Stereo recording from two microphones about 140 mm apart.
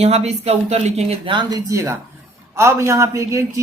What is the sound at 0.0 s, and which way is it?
Speech, 50° right (ahead or behind).